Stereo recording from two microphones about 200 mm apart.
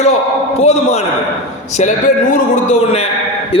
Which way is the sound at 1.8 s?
40° left (ahead or behind).